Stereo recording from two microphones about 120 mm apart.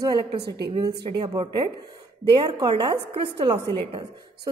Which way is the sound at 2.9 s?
55° right (ahead or behind).